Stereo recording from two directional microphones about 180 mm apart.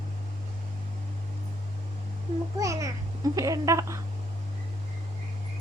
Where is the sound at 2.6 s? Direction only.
15° right (ahead or behind).